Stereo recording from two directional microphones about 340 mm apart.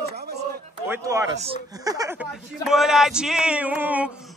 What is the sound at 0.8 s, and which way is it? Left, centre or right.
Speech, centre.